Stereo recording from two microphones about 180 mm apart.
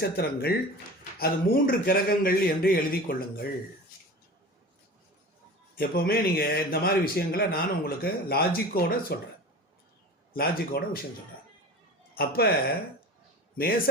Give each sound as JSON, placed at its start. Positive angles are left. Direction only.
{"t": 0.0, "sound": "a man's voice", "side_deg": 60}
{"t": 5.7, "sound": "a man's voice", "side_deg": 55}
{"t": 10.3, "sound": "a man's voice", "side_deg": 55}
{"t": 12.1, "sound": "a man's voice", "side_deg": 55}